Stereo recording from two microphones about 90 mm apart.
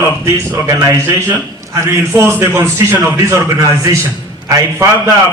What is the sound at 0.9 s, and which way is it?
A man's voice, 30° right (ahead or behind).